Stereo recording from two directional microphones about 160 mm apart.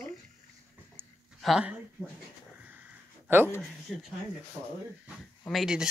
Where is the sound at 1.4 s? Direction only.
5° right (ahead or behind).